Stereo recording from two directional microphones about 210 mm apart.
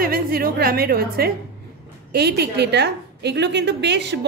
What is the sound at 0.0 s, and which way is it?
A woman's voice, 45° right (ahead or behind).